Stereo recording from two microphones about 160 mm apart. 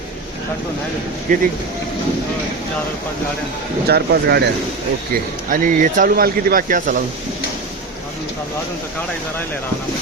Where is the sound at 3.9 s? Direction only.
80° right.